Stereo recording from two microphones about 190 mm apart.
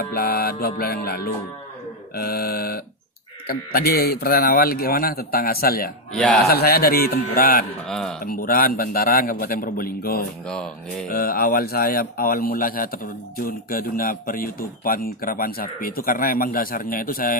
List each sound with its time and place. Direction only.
0.0 s music: 55° left (ahead or behind)
2.1 s a man's voice: 55° left (ahead or behind)
6.1 s speech: 5° left (ahead or behind)
6.4 s a man's voice: 55° left (ahead or behind)
7.8 s speech: 5° left (ahead or behind)
8.2 s a man's voice: 50° left (ahead or behind)
10.4 s speech: 5° left (ahead or behind)
11.1 s a man's voice: 50° left (ahead or behind)